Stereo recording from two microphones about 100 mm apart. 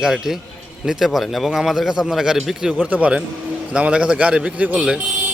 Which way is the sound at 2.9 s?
15° right (ahead or behind).